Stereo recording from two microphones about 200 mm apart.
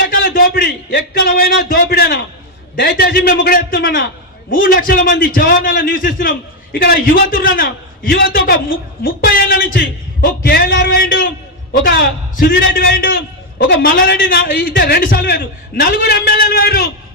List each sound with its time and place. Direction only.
0.0 s a man's voice: 45° left (ahead or behind)